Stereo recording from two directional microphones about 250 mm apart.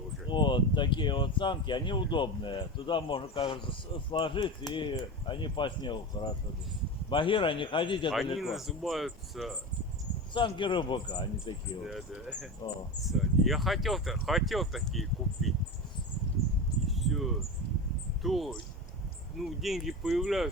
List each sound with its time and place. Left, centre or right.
0.3 s speech: centre
8.4 s speech: centre
10.3 s speech: centre
11.9 s speech: centre
16.9 s cricket: centre
18.2 s speech: centre